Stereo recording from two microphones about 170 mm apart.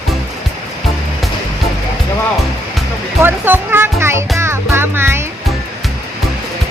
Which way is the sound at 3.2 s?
10° right (ahead or behind).